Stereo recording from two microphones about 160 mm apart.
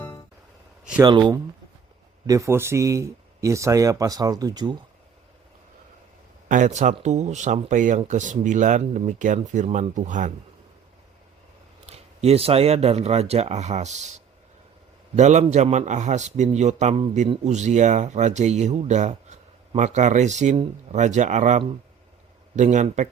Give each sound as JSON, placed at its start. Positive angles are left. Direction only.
{"t": 0.0, "sound": "music", "side_deg": 25}
{"t": 1.0, "sound": "speech", "side_deg": -25}
{"t": 6.5, "sound": "speech", "side_deg": -50}
{"t": 11.9, "sound": "speech", "side_deg": -40}
{"t": 15.1, "sound": "speech", "side_deg": -45}